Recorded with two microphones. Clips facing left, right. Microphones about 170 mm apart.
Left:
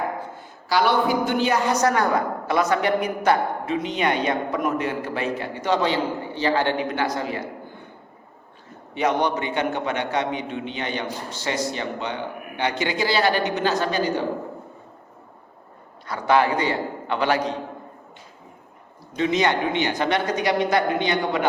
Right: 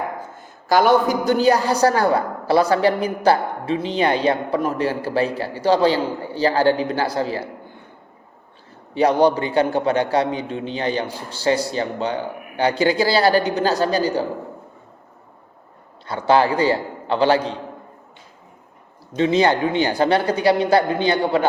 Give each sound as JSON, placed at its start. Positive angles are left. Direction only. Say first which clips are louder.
{"t": 0.3, "sound": "a woman's voice", "louder": "right 6 dB", "side_deg": -45}
{"t": 9.0, "sound": "a woman's voice", "louder": "right 6 dB", "side_deg": -35}
{"t": 16.0, "sound": "a man's voice", "louder": "right 3 dB", "side_deg": -30}
{"t": 19.1, "sound": "a woman's voice", "louder": "right 4 dB", "side_deg": -30}